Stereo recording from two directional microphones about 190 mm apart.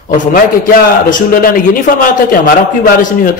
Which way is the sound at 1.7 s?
50° left (ahead or behind).